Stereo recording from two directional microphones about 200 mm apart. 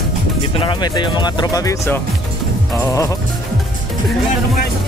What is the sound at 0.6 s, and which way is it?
Speech, 20° left (ahead or behind).